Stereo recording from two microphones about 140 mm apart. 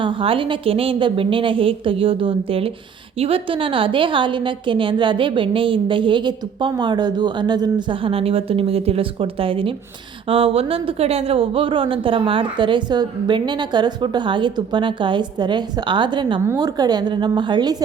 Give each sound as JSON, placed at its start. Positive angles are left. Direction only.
{"t": 0.0, "sound": "a woman's voice", "side_deg": -40}